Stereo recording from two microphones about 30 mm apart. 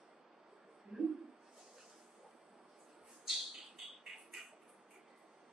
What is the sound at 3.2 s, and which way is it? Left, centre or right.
Bird, centre.